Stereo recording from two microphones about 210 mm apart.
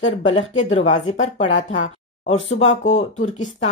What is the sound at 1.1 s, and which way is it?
Speech, 35° left (ahead or behind).